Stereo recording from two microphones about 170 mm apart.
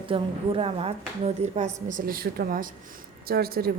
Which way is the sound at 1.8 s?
55° right (ahead or behind).